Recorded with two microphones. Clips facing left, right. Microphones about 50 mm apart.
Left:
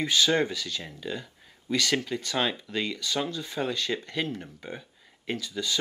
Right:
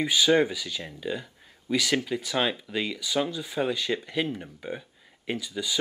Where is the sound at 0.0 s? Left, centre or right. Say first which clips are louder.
Right 2 dB; centre.